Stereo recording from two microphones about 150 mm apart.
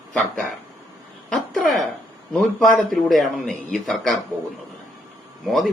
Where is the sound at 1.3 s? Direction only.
Centre (ahead or behind).